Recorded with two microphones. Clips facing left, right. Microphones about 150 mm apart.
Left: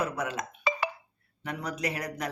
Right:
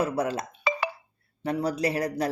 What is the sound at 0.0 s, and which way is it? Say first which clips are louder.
Speech: right 5 dB; 35° right (ahead or behind).